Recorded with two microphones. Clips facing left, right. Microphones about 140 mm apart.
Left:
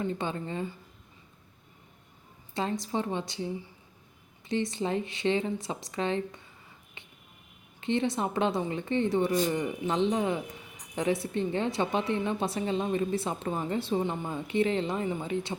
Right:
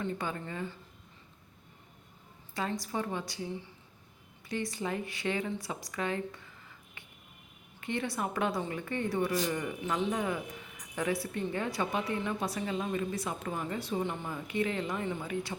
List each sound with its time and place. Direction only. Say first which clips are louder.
0.0 s a woman's voice: left 4 dB; 25° left (ahead or behind)
2.6 s a woman's voice: left 4 dB; 25° left (ahead or behind)